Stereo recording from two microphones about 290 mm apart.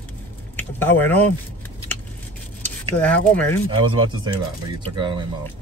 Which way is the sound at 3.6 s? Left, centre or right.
Centre.